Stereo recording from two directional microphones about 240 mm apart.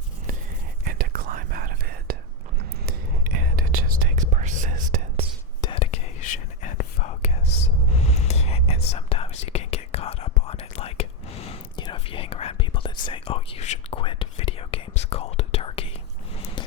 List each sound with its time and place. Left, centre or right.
0.9 s whispering: right
5.5 s whispering: centre